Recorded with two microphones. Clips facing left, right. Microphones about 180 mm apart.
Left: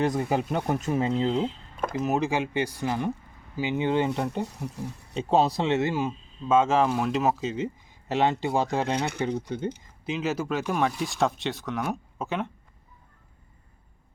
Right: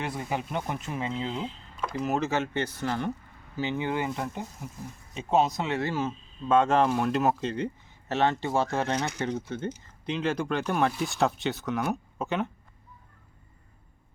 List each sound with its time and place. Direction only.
0.0 s speech: 40° left (ahead or behind)
1.7 s a sound: 55° left (ahead or behind)
2.0 s speech: 15° left (ahead or behind)
6.5 s speech: 5° left (ahead or behind)
8.0 s speech: 15° left (ahead or behind); by 12.5 s centre (ahead or behind)